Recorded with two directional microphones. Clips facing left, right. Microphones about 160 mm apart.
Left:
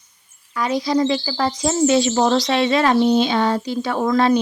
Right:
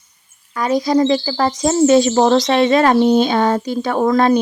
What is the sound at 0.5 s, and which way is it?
Speech, 45° right (ahead or behind).